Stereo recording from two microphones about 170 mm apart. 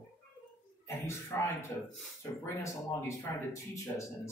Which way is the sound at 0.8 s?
15° left (ahead or behind).